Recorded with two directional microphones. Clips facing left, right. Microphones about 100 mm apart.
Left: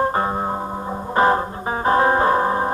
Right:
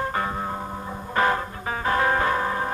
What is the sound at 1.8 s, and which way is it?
Music, 30° left (ahead or behind).